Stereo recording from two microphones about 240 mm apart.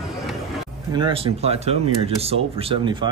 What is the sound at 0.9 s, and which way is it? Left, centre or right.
Speech, right.